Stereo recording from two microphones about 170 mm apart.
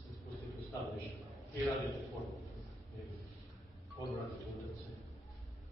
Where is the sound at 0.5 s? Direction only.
Centre (ahead or behind).